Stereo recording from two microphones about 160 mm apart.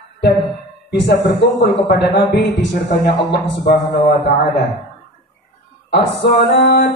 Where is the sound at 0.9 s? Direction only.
90° left.